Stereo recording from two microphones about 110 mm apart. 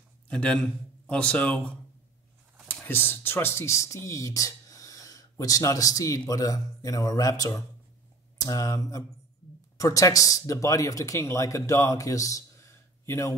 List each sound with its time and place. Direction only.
0.3 s speech: 10° left (ahead or behind)
2.8 s speech: 20° left (ahead or behind)